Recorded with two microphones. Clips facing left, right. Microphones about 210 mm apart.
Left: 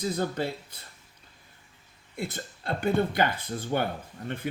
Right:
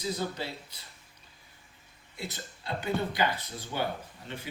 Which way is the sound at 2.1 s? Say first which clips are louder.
Left 6 dB; 55° left (ahead or behind).